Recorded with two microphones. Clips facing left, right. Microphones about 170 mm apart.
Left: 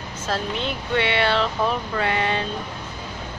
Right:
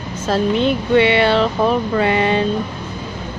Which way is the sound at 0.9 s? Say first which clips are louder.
Right 7 dB; 15° right (ahead or behind).